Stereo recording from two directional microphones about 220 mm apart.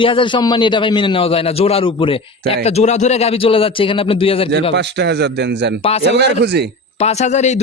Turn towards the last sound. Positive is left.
turn(degrees=30)  # may be behind; listen again after turning